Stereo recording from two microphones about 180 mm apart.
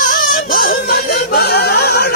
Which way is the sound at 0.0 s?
50° left (ahead or behind).